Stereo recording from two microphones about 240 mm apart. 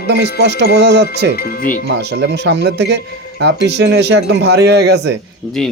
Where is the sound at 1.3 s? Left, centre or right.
Left.